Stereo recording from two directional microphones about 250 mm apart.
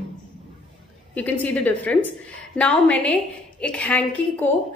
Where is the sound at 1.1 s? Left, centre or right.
Centre.